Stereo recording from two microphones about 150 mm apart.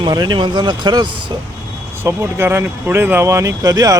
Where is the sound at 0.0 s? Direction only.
30° right (ahead or behind).